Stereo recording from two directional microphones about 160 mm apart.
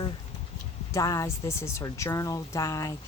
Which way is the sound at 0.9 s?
20° left (ahead or behind).